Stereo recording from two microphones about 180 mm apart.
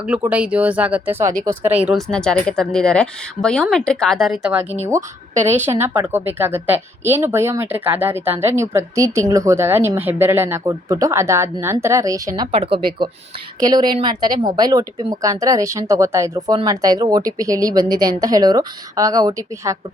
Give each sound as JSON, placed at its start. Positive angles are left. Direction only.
{"t": 0.0, "sound": "a woman's voice", "side_deg": -5}
{"t": 4.9, "sound": "a woman's voice", "side_deg": -40}
{"t": 5.5, "sound": "a woman's voice", "side_deg": -10}
{"t": 12.4, "sound": "a woman's voice", "side_deg": -30}